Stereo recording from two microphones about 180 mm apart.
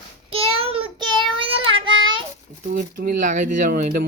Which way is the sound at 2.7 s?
50° right (ahead or behind).